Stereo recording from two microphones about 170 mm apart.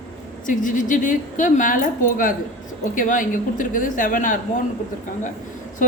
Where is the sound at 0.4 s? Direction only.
50° left (ahead or behind).